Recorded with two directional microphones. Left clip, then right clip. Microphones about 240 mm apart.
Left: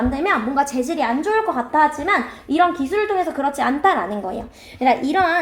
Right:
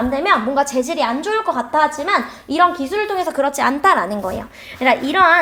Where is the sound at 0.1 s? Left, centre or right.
Right.